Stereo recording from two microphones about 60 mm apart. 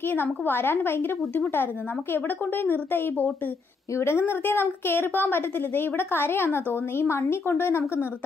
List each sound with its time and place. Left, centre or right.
0.1 s a woman's voice: left